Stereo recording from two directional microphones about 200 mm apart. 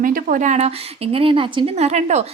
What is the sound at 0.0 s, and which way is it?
A woman's voice, 45° right (ahead or behind).